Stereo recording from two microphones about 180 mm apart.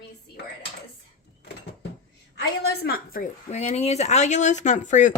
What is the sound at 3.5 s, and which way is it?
Speech, 40° left (ahead or behind).